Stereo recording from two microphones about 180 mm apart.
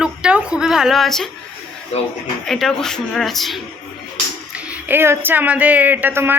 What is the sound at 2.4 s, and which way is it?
Speech, centre (ahead or behind).